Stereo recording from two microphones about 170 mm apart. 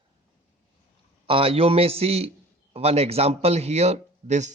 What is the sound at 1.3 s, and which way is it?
A man's voice, 35° right (ahead or behind).